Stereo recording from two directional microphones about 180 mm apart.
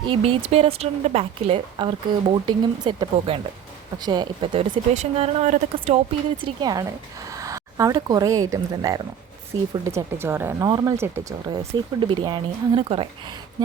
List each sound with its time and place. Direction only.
0.1 s a woman's voice: 30° right (ahead or behind)
4.7 s a woman's voice: 35° right (ahead or behind)
6.4 s speech: 20° right (ahead or behind)